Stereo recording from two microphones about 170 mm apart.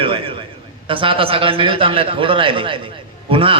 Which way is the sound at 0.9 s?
30° right (ahead or behind).